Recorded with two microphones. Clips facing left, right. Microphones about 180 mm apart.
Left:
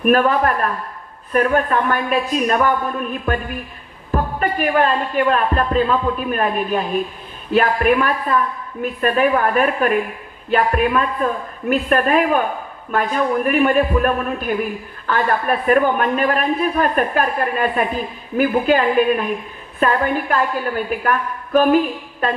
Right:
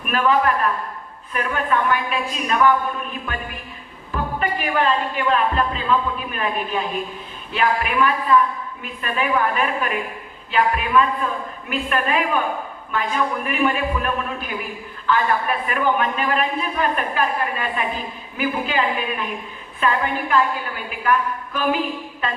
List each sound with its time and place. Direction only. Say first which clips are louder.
0.0 s a man's voice: left 4 dB; 45° left (ahead or behind)